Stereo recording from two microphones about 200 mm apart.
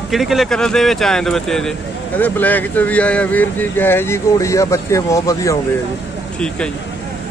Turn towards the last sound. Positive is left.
turn(degrees=15)  # may be behind; listen again after turning